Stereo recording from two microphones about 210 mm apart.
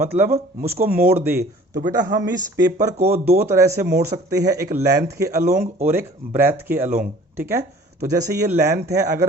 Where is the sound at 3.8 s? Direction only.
50° right (ahead or behind).